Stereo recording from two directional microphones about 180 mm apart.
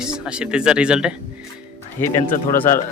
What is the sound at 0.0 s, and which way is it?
Speech, 5° right (ahead or behind).